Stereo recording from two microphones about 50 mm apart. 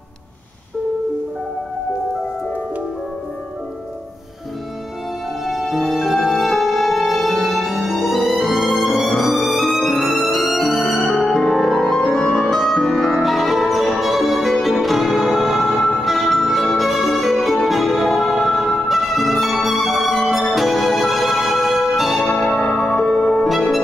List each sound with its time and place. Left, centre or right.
5.4 s music: centre
12.4 s music: centre
13.2 s music: centre
22.3 s change ringing: left
22.8 s music: centre
23.5 s music: centre